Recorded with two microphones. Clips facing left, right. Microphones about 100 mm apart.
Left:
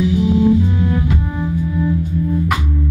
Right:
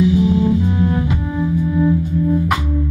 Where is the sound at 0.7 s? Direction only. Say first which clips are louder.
Right 1 dB; 20° right (ahead or behind).